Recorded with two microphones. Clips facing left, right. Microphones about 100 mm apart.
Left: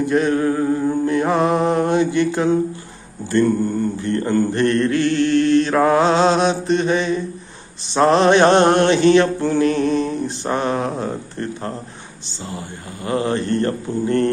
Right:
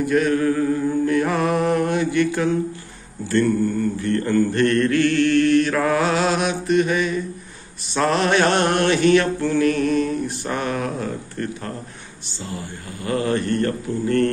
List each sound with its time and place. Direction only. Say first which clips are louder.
0.0 s mantra: left 1 dB; 25° left (ahead or behind)